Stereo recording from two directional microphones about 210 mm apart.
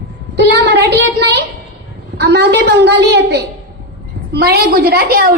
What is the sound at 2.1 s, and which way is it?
A woman's voice, 50° right (ahead or behind).